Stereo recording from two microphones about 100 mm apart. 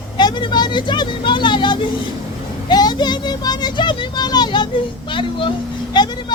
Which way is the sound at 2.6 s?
45° left (ahead or behind).